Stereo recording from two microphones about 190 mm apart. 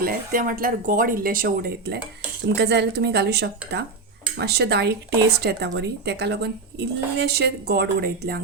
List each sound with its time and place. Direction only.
0.0 s speech: 50° right (ahead or behind)